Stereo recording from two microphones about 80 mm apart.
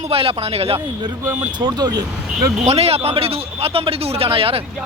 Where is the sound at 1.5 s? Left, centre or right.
Right.